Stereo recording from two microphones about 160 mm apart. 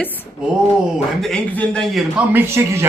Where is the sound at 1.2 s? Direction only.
5° left (ahead or behind).